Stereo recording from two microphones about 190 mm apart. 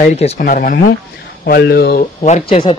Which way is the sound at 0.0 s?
35° left (ahead or behind).